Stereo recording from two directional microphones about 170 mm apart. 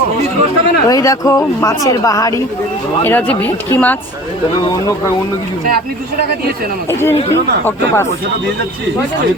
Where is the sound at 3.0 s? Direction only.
10° left (ahead or behind).